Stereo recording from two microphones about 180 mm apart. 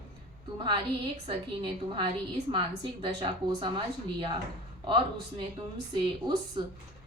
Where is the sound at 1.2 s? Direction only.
30° right (ahead or behind).